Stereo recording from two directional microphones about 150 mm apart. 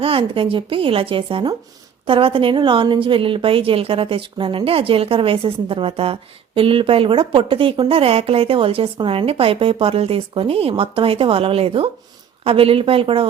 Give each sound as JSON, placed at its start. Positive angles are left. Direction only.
{"t": 0.0, "sound": "a woman's voice", "side_deg": -35}